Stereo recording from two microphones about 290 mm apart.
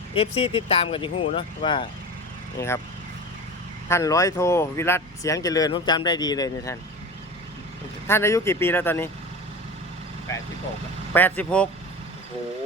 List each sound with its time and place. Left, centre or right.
0.1 s speech: centre
3.8 s speech: centre
8.0 s speech: centre
11.1 s speech: centre